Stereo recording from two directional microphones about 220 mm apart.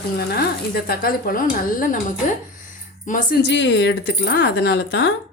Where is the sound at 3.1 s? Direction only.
40° left (ahead or behind); by 5.1 s 55° left (ahead or behind).